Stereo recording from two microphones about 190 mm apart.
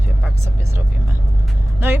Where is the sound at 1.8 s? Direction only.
10° right (ahead or behind).